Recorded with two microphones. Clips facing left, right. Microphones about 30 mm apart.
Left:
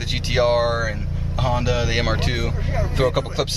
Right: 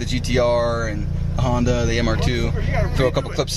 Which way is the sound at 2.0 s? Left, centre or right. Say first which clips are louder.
Right 2 dB; centre.